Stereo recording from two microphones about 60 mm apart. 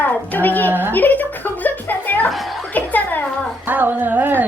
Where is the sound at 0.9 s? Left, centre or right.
Left.